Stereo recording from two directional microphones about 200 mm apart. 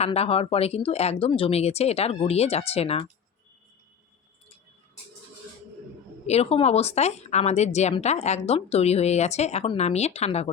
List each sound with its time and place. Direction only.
0.0 s speech: 30° left (ahead or behind)
6.2 s speech: 30° left (ahead or behind)